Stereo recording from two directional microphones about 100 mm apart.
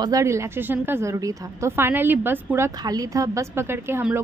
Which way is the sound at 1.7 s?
20° right (ahead or behind).